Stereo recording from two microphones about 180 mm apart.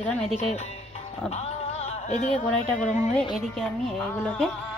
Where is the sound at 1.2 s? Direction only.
35° left (ahead or behind).